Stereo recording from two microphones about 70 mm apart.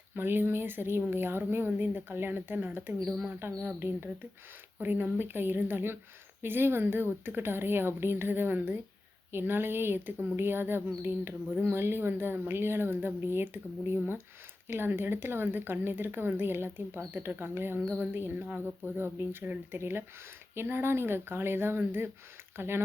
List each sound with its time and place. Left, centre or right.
0.2 s a woman's voice: right